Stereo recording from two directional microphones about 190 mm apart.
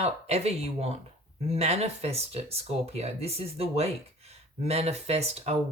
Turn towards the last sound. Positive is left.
turn(degrees=-35)  # may be behind; listen again after turning